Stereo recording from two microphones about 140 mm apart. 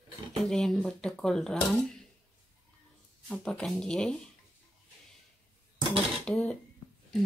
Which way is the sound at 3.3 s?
5° left (ahead or behind).